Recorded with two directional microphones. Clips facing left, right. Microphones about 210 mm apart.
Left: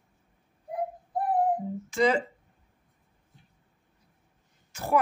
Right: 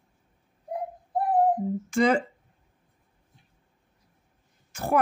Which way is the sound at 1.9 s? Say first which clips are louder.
Right 2 dB; 50° right (ahead or behind).